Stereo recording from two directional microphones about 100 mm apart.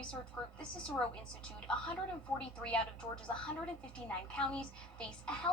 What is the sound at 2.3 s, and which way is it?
Speech, 10° left (ahead or behind).